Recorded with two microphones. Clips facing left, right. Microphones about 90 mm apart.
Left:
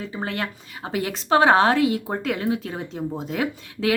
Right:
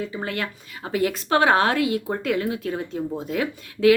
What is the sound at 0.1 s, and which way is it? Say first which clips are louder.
Speech: even; 30° left (ahead or behind).